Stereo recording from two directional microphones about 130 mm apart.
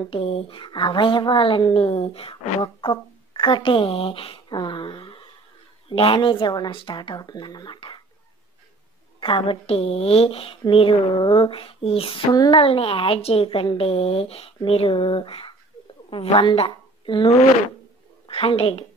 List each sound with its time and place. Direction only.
0.1 s a woman's voice: 50° left (ahead or behind)
9.2 s a woman's voice: 40° left (ahead or behind)